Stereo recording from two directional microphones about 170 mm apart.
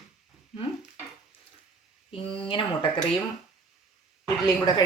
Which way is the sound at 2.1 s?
30° left (ahead or behind).